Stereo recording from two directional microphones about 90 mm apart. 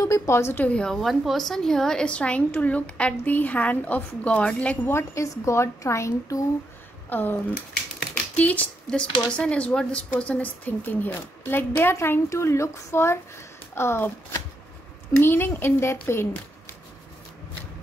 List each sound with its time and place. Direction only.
0.0 s a woman's voice: 30° left (ahead or behind)
0.7 s a woman's voice: 10° left (ahead or behind)
4.9 s a woman's voice: 35° left (ahead or behind)
7.1 s speech: 20° left (ahead or behind)
8.4 s a woman's voice: 15° left (ahead or behind)
15.1 s speech: 25° left (ahead or behind)